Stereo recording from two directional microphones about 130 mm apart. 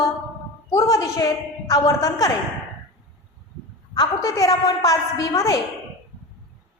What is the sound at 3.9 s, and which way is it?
A man's voice, 30° left (ahead or behind).